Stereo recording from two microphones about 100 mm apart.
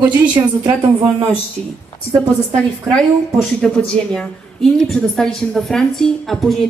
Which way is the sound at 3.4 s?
5° left (ahead or behind).